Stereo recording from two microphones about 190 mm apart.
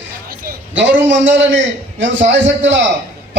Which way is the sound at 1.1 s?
75° right (ahead or behind).